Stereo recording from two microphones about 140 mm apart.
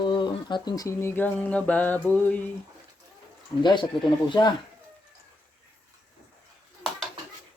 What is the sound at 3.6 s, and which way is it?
Speech, 30° left (ahead or behind).